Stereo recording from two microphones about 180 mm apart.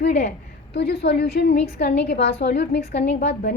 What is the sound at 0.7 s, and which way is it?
A woman's voice, 65° left (ahead or behind).